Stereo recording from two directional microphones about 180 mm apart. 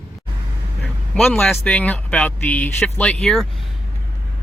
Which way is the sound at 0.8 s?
Centre (ahead or behind).